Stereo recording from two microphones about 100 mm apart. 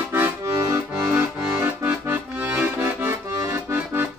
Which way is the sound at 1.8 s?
20° right (ahead or behind).